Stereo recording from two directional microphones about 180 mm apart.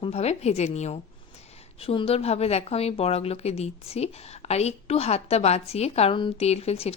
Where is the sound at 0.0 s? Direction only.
35° left (ahead or behind).